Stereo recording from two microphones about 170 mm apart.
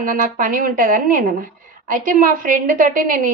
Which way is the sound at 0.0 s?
55° right (ahead or behind).